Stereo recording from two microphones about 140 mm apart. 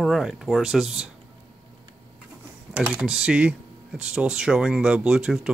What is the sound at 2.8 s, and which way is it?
Speech, 5° right (ahead or behind).